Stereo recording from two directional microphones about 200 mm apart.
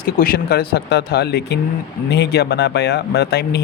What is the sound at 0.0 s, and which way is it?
Speech, 50° left (ahead or behind).